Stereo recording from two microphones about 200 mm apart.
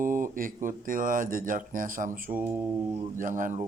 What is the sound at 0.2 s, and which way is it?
Speech, 45° right (ahead or behind).